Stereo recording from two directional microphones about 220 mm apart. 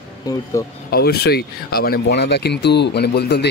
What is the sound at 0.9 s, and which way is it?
Speech, 45° left (ahead or behind).